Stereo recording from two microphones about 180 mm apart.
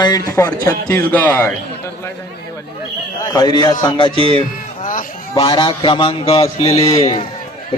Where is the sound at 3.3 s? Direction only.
20° left (ahead or behind).